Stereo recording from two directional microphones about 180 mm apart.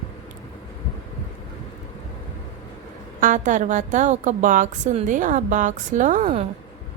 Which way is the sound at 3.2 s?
45° right (ahead or behind).